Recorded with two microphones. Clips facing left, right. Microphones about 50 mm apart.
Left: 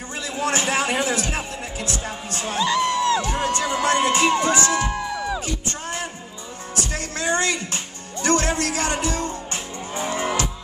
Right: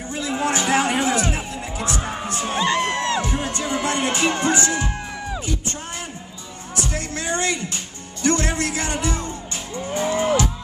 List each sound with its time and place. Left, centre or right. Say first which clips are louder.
0.2 s a sound: right 3 dB; right
0.5 s a sound: right 1 dB; left
0.7 s music: right 2 dB; right
3.3 s music: left 2 dB; left
4.3 s music: left 1 dB; right
7.2 s music: left 2 dB; left
8.5 s music: left 1 dB; right
8.7 s music: left 1 dB; left
10.0 s cattle: right 4 dB; left